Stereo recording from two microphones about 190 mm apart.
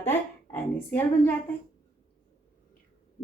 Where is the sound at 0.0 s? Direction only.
10° left (ahead or behind).